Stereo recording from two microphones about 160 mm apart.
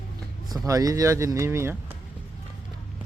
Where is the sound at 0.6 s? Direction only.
20° right (ahead or behind).